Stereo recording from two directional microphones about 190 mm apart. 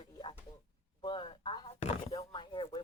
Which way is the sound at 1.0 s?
25° left (ahead or behind).